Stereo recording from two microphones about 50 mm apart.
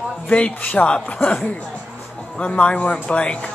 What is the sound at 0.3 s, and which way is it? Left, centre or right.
A woman's voice, left.